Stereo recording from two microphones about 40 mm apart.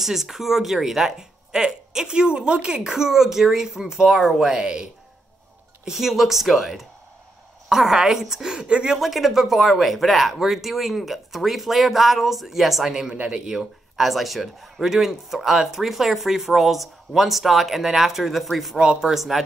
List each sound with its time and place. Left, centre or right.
0.0 s speech: centre
5.9 s speech: centre
8.5 s speech: right
8.9 s speech: centre
18.8 s speech: centre
19.1 s speech: centre